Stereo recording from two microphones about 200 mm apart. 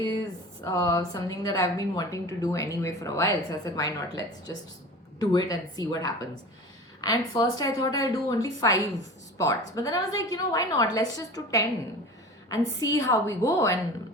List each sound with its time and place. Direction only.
0.6 s a woman's voice: 15° left (ahead or behind)